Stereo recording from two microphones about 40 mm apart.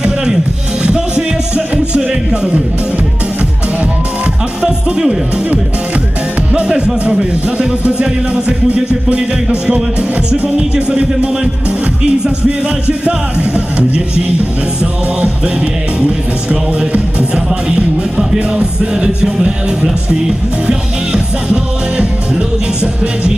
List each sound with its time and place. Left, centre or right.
0.8 s music: right
6.5 s music: right
12.5 s music: right
15.2 s music: right
17.3 s music: right